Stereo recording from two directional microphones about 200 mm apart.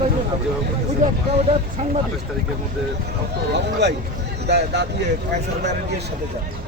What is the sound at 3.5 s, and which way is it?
Speech, 55° right (ahead or behind).